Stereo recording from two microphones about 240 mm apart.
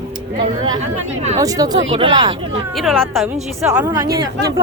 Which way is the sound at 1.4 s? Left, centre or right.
Centre.